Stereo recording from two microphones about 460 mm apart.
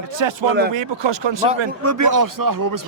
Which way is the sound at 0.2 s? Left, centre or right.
Right.